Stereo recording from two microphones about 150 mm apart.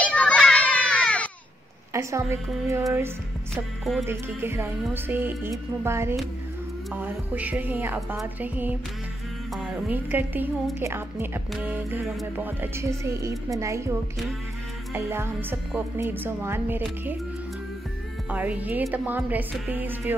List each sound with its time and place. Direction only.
0.0 s children playing: 10° left (ahead or behind)
2.0 s a woman's voice: 20° right (ahead or behind)
4.1 s a woman's voice: 15° right (ahead or behind)
9.8 s a woman's voice: 10° right (ahead or behind)
15.0 s a woman's voice: 15° right (ahead or behind)
18.3 s a woman's voice: 10° right (ahead or behind)